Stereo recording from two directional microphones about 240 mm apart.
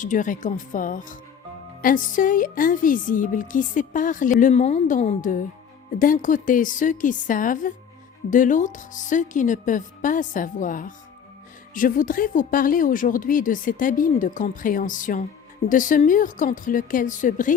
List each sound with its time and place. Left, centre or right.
0.0 s speech: left